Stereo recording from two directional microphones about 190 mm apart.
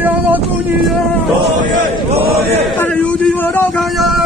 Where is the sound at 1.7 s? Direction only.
35° right (ahead or behind).